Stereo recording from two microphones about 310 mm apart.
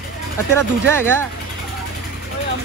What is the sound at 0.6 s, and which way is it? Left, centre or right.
Speech, centre.